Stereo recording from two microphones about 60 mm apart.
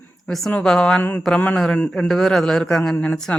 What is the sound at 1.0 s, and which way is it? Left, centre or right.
Speech, left.